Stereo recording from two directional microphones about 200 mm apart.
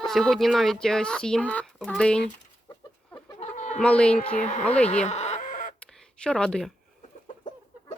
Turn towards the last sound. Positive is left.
turn(degrees=5)  # may be behind; listen again after turning